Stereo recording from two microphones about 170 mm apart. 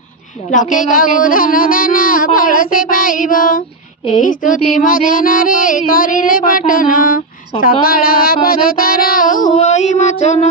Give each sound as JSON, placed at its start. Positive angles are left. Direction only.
{"t": 0.5, "sound": "speech", "side_deg": 50}
{"t": 4.2, "sound": "child singing", "side_deg": 50}
{"t": 7.8, "sound": "speech", "side_deg": 60}